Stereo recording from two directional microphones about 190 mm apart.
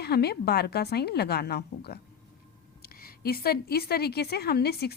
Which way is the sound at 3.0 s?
50° left (ahead or behind).